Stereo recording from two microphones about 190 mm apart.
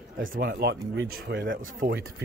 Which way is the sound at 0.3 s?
55° right (ahead or behind).